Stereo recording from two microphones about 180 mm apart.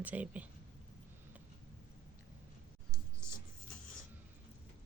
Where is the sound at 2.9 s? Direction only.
15° right (ahead or behind).